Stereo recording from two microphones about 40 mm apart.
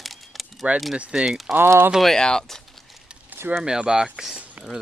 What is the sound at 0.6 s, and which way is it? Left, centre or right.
Speech, right.